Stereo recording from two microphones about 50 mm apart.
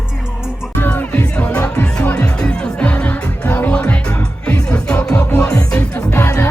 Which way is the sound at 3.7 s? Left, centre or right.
Centre.